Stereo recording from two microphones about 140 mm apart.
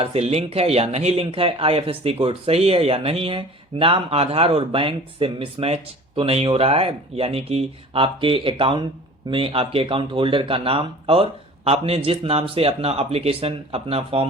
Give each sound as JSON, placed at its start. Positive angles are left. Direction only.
{"t": 0.0, "sound": "speech", "side_deg": -50}